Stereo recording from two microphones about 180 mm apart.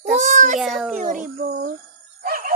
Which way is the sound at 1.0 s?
45° right (ahead or behind).